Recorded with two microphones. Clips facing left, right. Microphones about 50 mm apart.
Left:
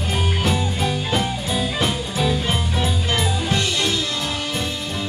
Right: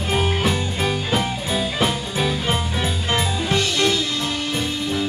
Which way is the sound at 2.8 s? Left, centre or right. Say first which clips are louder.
Left 1 dB; right.